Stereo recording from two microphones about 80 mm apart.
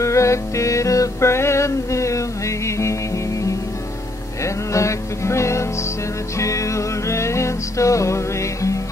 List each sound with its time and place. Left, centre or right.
0.0 s music: left
4.4 s music: left